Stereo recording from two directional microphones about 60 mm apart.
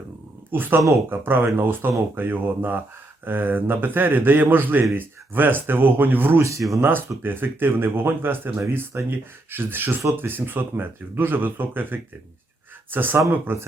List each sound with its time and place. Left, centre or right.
0.5 s speech: right